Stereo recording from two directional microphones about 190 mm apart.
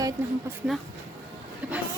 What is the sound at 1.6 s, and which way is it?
Speech, 5° right (ahead or behind).